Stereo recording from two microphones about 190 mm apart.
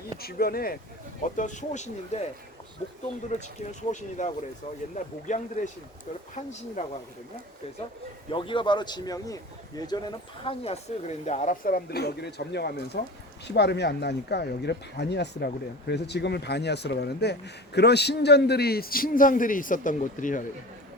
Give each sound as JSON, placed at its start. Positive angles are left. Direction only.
{"t": 0.2, "sound": "speech", "side_deg": 55}
{"t": 1.2, "sound": "speech", "side_deg": 40}
{"t": 8.3, "sound": "a man's voice", "side_deg": 25}
{"t": 10.4, "sound": "speech", "side_deg": 30}